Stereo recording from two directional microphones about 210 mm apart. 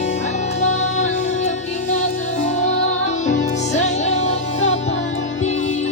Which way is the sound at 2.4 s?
35° left (ahead or behind).